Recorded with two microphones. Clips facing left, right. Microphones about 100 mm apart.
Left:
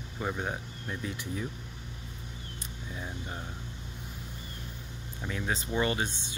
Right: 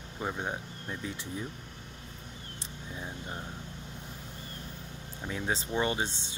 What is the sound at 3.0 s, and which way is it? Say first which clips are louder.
Speech: even; 5° right (ahead or behind).